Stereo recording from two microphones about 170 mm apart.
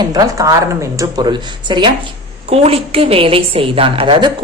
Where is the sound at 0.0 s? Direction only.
20° right (ahead or behind).